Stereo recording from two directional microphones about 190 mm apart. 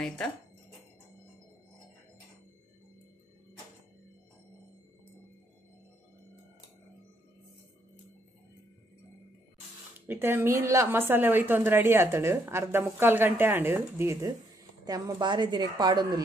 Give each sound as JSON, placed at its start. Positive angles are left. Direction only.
{"t": 9.9, "sound": "a woman's voice", "side_deg": -10}